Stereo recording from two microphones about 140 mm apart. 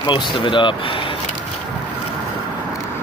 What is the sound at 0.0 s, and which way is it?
Speech, 35° left (ahead or behind).